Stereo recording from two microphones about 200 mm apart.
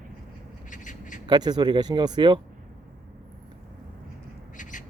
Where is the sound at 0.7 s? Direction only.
40° left (ahead or behind).